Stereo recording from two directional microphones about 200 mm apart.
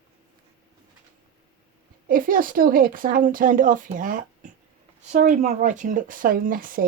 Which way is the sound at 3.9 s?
40° right (ahead or behind).